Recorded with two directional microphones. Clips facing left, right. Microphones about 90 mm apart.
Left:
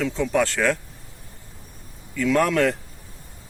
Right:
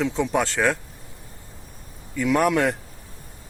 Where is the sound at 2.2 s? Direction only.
15° right (ahead or behind).